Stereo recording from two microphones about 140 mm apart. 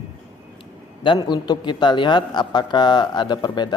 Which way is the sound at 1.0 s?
35° left (ahead or behind).